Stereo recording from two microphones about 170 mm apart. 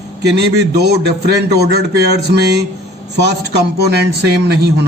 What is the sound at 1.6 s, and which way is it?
A man's voice, 75° right (ahead or behind).